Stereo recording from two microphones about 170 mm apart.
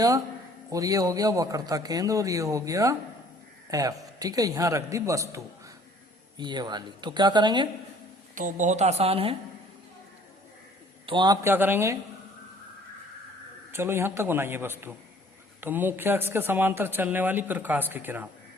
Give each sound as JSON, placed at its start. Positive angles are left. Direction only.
{"t": 0.7, "sound": "a man's voice", "side_deg": -20}
{"t": 8.4, "sound": "a woman's voice", "side_deg": -50}
{"t": 11.0, "sound": "a man's voice", "side_deg": -25}
{"t": 11.4, "sound": "speech", "side_deg": -10}
{"t": 13.7, "sound": "speech", "side_deg": -15}